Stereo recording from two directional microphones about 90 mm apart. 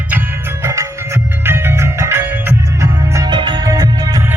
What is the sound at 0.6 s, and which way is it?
Music, 35° right (ahead or behind).